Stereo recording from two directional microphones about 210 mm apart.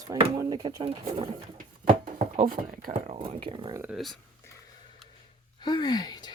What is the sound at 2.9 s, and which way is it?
Speech, 25° right (ahead or behind).